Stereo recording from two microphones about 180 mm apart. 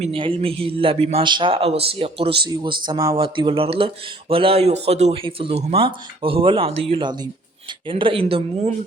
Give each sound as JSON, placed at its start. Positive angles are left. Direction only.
{"t": 0.0, "sound": "speech", "side_deg": -30}